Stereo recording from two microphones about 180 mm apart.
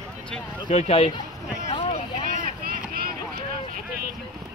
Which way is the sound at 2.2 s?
50° right (ahead or behind).